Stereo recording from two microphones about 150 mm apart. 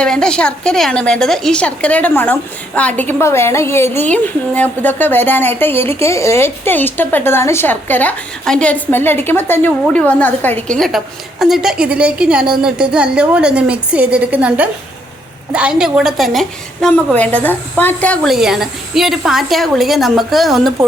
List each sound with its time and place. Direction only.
0.0 s a woman's voice: 5° left (ahead or behind)